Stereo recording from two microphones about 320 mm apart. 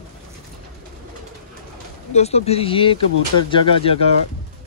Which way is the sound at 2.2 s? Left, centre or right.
Centre.